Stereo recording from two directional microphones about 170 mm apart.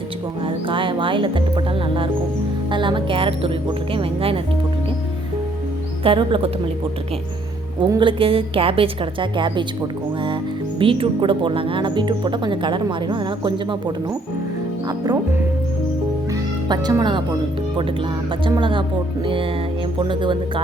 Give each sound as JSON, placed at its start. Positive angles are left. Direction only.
{"t": 0.4, "sound": "a woman's voice", "side_deg": -30}
{"t": 6.0, "sound": "a woman's voice", "side_deg": -30}
{"t": 7.8, "sound": "a woman's voice", "side_deg": -25}
{"t": 10.8, "sound": "speech", "side_deg": -30}
{"t": 16.3, "sound": "music", "side_deg": -25}
{"t": 18.4, "sound": "speech", "side_deg": -30}